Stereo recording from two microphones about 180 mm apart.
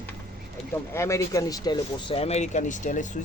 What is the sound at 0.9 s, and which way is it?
Speech, 15° left (ahead or behind).